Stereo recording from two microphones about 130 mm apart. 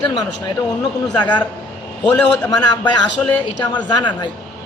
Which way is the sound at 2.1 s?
30° left (ahead or behind).